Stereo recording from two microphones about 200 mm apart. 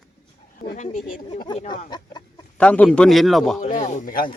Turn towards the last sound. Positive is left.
turn(degrees=45)  # may be behind; listen again after turning